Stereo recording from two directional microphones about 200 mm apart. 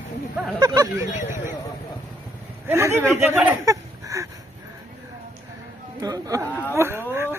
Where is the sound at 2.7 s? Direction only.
10° right (ahead or behind).